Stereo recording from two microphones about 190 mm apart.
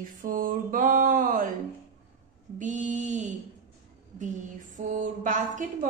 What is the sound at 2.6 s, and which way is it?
Mantra, 40° right (ahead or behind).